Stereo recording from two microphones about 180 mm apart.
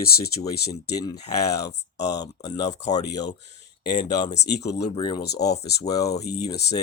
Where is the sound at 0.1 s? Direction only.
60° left (ahead or behind).